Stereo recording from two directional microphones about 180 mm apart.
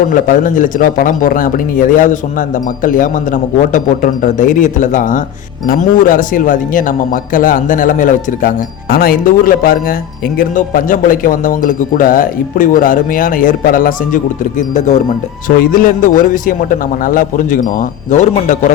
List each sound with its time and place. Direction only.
0.1 s speech: 50° left (ahead or behind)